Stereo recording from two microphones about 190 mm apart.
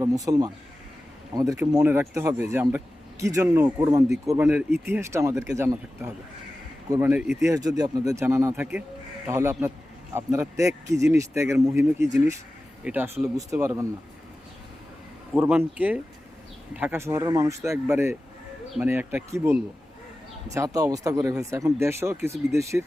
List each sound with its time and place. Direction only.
0.0 s a man's voice: 20° right (ahead or behind)
15.3 s a man's voice: 5° right (ahead or behind)